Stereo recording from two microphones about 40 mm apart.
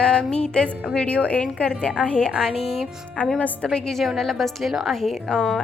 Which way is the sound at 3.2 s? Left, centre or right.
Left.